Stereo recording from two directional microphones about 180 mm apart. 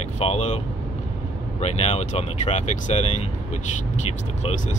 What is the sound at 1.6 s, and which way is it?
Speech, 40° left (ahead or behind).